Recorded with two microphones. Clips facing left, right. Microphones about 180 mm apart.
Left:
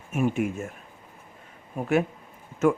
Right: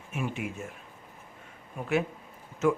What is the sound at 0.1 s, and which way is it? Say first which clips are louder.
Speech: left 9 dB; 45° left (ahead or behind).